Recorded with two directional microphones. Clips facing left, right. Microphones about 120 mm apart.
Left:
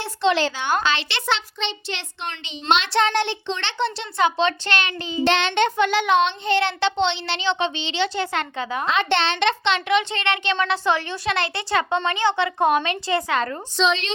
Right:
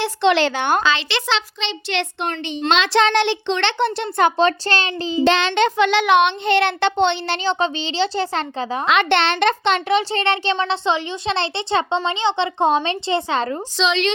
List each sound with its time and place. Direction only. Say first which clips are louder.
0.0 s a child's voice: right 4 dB; 70° right (ahead or behind)
2.6 s a child's voice: right 3 dB; 90° right; by 5.2 s 30° right (ahead or behind)
5.5 s speech: right 3 dB; 90° right; by 8.8 s 35° right (ahead or behind)
8.9 s a child's voice: right 4 dB; 65° right (ahead or behind); by 13.6 s 25° right (ahead or behind)
13.7 s a woman's voice: right 1 dB; 85° right